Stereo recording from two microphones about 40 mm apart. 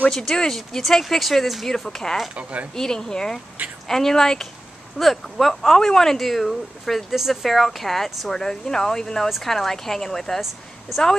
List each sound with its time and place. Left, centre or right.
0.1 s speech: centre
2.3 s speech: right
2.7 s speech: centre
4.9 s speech: centre